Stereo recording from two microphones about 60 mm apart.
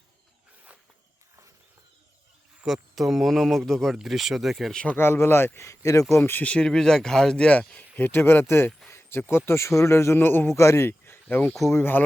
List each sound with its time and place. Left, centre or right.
2.6 s speech: centre
4.7 s speech: centre
4.9 s speech: left
5.5 s a man's voice: left
6.4 s speech: left
6.7 s speech: centre; by 8.7 s left
8.9 s a sound: left
9.3 s speech: left
10.5 s speech: left